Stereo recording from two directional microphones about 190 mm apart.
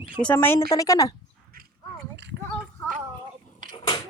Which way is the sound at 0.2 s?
10° left (ahead or behind).